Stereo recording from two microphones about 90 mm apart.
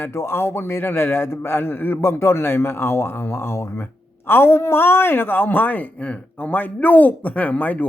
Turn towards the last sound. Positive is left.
turn(degrees=20)  # may be behind; listen again after turning